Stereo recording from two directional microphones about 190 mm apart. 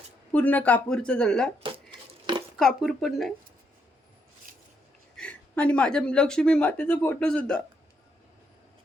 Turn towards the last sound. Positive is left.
turn(degrees=5)  # may be behind; listen again after turning